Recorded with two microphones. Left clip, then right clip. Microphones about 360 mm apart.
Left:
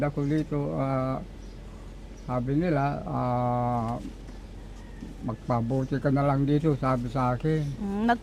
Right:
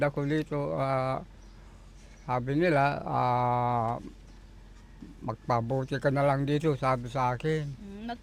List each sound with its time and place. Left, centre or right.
0.0 s speech: right
2.2 s speech: right
5.2 s speech: right
7.9 s speech: left